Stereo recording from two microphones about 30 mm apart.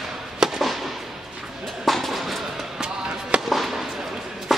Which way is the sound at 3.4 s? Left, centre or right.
Centre.